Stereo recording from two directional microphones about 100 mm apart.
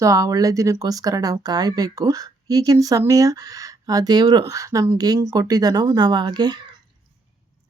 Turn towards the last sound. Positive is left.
turn(degrees=-45)  # may be behind; listen again after turning